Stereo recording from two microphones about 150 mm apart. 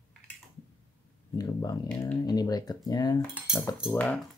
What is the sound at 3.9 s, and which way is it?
Speech, 10° left (ahead or behind).